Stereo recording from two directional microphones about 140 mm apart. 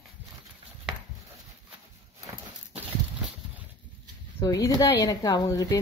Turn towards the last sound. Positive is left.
turn(degrees=25)  # may be behind; listen again after turning